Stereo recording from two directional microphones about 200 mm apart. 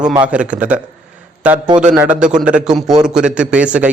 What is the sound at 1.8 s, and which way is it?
A man's voice, 5° right (ahead or behind).